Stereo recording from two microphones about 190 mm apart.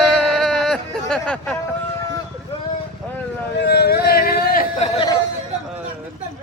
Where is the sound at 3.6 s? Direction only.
60° left (ahead or behind).